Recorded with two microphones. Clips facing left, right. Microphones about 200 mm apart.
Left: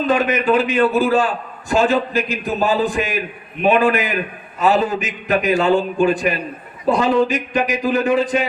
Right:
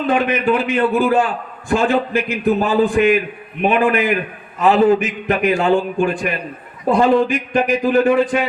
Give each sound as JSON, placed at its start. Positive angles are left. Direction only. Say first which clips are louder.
{"t": 0.1, "sound": "a man's voice", "louder": "even", "side_deg": -55}